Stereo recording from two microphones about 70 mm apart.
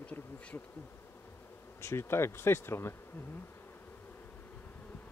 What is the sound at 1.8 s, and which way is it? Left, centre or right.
Speech, left.